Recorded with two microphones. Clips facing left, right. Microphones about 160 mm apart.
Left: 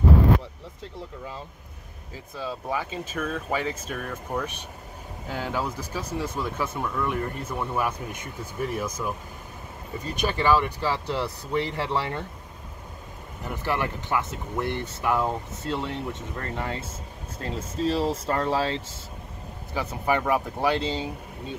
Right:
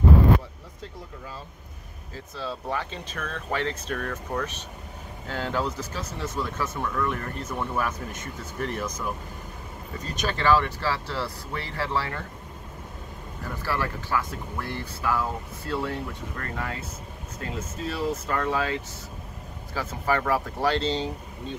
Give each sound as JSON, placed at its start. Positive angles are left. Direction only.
{"t": 2.1, "sound": "speech", "side_deg": 15}
{"t": 10.2, "sound": "speech", "side_deg": 15}
{"t": 13.4, "sound": "speech", "side_deg": 20}
{"t": 19.7, "sound": "speech", "side_deg": 15}